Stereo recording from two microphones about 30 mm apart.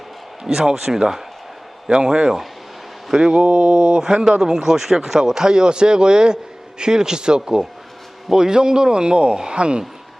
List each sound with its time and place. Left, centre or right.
0.4 s speech: centre
1.9 s speech: right
3.4 s speech: right